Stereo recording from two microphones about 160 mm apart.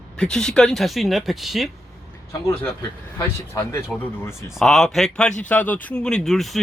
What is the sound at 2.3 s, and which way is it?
Speech, 20° left (ahead or behind).